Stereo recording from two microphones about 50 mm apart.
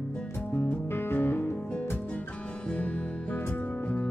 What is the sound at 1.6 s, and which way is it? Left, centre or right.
Music, left.